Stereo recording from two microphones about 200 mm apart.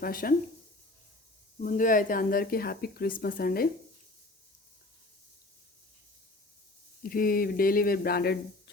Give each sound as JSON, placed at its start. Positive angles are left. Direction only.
{"t": 0.0, "sound": "speech", "side_deg": 45}
{"t": 1.6, "sound": "speech", "side_deg": 40}
{"t": 7.0, "sound": "speech", "side_deg": 45}